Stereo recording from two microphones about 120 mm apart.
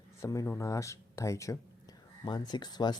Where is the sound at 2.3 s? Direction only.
35° left (ahead or behind).